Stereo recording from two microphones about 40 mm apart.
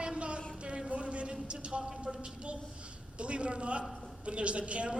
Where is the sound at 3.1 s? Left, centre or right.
Right.